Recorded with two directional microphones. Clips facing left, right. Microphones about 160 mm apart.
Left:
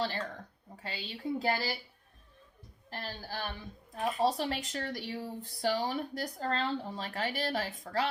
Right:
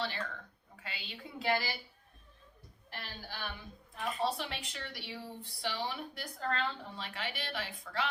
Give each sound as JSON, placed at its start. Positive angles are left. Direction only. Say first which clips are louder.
{"t": 0.0, "sound": "speech", "louder": "left 4 dB", "side_deg": 40}
{"t": 2.9, "sound": "speech", "louder": "left 6 dB", "side_deg": 40}